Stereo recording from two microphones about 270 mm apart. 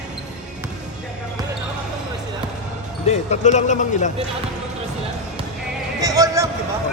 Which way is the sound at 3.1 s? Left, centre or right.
Left.